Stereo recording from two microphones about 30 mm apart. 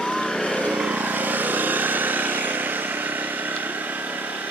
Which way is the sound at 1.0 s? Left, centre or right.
Right.